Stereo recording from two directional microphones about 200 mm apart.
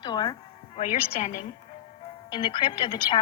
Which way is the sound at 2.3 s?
25° left (ahead or behind).